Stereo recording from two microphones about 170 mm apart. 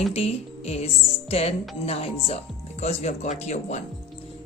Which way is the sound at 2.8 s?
40° left (ahead or behind).